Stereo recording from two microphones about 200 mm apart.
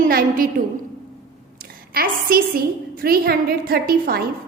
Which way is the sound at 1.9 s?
45° right (ahead or behind).